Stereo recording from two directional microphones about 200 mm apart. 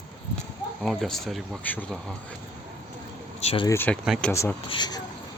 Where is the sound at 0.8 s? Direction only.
Centre (ahead or behind).